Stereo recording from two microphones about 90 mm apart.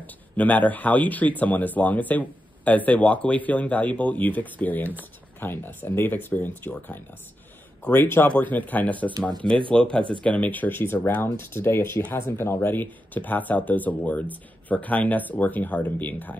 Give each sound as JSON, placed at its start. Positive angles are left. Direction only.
{"t": 0.0, "sound": "speech", "side_deg": 15}